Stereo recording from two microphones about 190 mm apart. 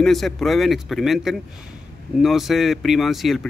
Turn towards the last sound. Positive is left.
turn(degrees=0)  # may be behind; listen again after turning